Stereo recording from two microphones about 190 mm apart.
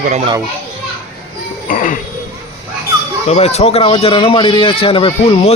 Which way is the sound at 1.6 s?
45° left (ahead or behind).